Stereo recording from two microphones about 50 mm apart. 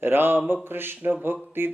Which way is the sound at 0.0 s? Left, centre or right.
Right.